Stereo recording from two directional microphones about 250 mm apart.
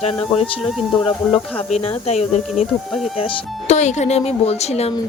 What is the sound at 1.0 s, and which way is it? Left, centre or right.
Speech, left.